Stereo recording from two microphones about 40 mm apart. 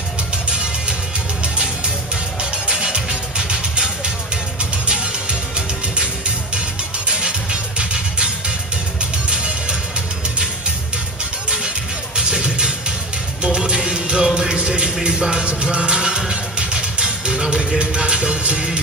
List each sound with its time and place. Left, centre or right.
2.6 s music: right
7.1 s music: right
12.2 s music: centre